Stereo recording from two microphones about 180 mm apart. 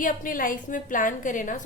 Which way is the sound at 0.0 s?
50° left (ahead or behind).